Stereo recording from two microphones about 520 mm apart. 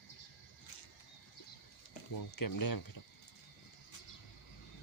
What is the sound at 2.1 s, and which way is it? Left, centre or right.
Speech, left.